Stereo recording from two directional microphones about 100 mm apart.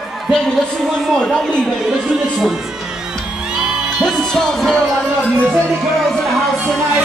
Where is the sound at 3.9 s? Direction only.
5° left (ahead or behind).